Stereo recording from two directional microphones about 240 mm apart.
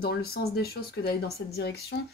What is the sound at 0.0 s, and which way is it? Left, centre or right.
A woman's voice, left.